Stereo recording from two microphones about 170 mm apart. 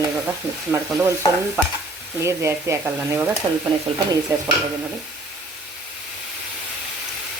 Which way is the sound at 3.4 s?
30° right (ahead or behind).